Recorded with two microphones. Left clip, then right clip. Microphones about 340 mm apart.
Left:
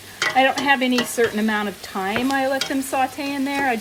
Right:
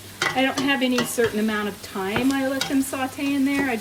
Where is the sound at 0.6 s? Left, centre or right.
Left.